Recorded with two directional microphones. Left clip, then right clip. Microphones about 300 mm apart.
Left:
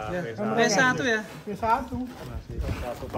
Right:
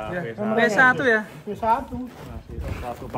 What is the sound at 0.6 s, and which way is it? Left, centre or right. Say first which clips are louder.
Speech: right 5 dB; centre.